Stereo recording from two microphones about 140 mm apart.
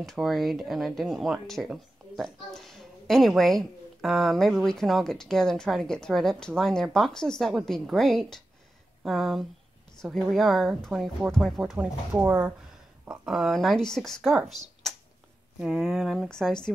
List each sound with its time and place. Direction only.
0.0 s speech: centre (ahead or behind)
15.6 s speech: centre (ahead or behind)